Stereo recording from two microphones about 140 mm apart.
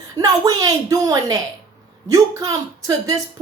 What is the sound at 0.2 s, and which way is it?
Speech, 25° right (ahead or behind).